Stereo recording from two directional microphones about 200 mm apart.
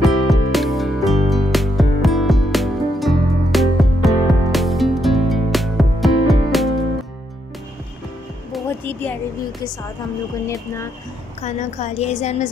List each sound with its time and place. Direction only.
0.0 s music: centre (ahead or behind)
8.6 s music: 10° left (ahead or behind)
10.4 s speech: 15° left (ahead or behind)
11.4 s a woman's voice: 35° left (ahead or behind)